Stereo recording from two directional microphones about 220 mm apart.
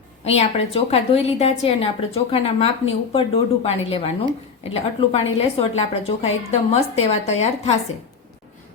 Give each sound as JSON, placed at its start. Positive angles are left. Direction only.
{"t": 0.3, "sound": "a woman's voice", "side_deg": 25}